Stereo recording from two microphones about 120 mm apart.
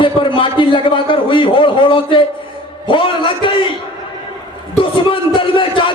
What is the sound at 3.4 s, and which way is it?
Speech, 45° left (ahead or behind).